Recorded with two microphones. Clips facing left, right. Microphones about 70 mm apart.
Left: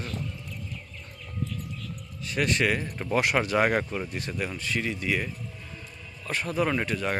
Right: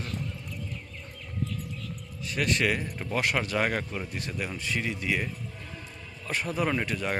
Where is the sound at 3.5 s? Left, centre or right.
Left.